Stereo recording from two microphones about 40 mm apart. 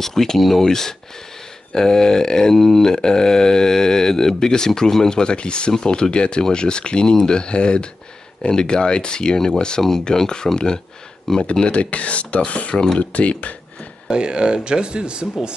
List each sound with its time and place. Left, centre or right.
0.0 s speech: centre
11.6 s speech: left
12.7 s speech: centre
13.1 s speech: left
14.0 s speech: right